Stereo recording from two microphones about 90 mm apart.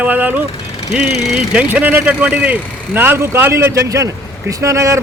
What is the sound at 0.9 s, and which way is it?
A man's voice, 5° right (ahead or behind).